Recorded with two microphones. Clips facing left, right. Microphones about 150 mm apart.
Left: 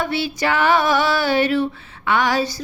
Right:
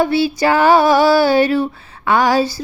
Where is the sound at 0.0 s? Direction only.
35° right (ahead or behind).